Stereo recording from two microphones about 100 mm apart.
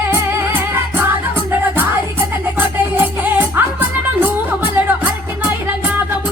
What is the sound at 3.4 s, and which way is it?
Music, 20° right (ahead or behind).